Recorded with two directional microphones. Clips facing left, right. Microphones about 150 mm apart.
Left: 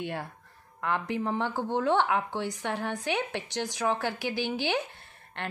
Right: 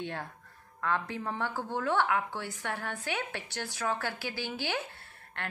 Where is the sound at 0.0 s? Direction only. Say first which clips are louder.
Left 3 dB; 10° left (ahead or behind).